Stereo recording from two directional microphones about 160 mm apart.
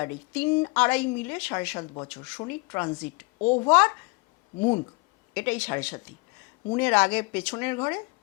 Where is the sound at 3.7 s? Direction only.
10° left (ahead or behind).